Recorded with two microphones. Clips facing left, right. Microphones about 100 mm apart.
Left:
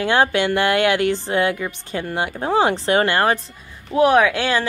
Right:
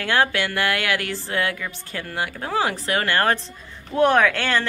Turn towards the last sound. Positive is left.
turn(degrees=10)  # may be behind; listen again after turning